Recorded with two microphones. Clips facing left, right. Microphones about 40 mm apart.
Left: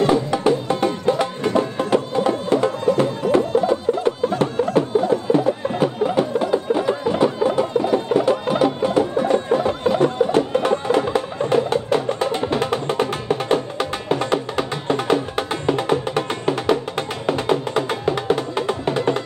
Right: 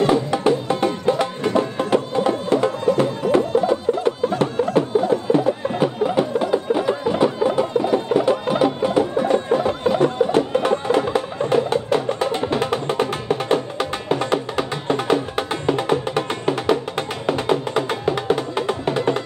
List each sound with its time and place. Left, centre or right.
0.0 s music: centre